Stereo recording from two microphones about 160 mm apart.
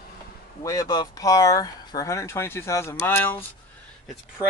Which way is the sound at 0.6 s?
25° left (ahead or behind).